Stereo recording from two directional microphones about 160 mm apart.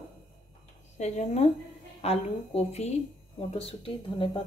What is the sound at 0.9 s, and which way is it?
A woman's voice, 45° left (ahead or behind).